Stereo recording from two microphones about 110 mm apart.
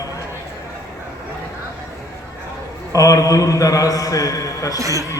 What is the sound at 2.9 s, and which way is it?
A man's voice, 30° left (ahead or behind).